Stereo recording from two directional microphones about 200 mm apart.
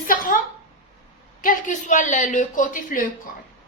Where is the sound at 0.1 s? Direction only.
45° left (ahead or behind).